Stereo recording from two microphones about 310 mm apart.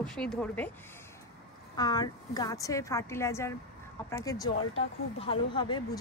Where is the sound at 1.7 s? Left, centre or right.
Centre.